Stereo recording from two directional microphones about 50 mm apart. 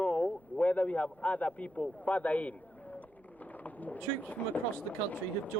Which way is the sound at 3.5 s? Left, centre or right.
Left.